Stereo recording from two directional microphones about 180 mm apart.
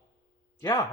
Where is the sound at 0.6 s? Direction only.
20° left (ahead or behind).